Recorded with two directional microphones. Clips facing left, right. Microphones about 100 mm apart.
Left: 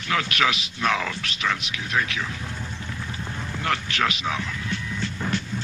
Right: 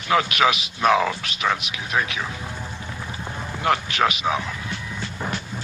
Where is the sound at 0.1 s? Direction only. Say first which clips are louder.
Right 5 dB; 20° right (ahead or behind).